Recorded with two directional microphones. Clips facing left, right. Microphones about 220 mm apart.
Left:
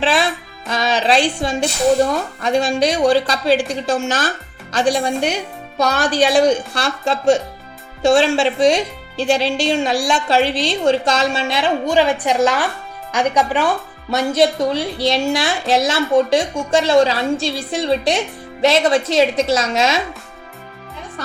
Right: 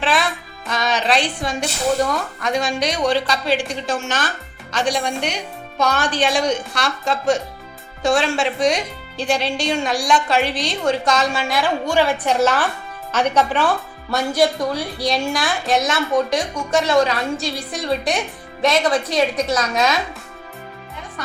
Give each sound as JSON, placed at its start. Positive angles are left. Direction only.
{"t": 0.0, "sound": "music", "side_deg": 30}
{"t": 0.7, "sound": "a woman's voice", "side_deg": 30}